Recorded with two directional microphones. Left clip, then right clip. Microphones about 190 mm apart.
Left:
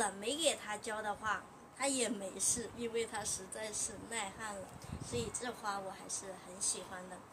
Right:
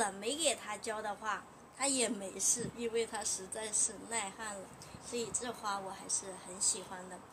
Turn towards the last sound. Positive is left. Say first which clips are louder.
# right 3 dB
turn(degrees=-15)  # may be behind; listen again after turning